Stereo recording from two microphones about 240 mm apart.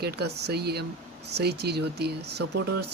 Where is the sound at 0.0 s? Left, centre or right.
Right.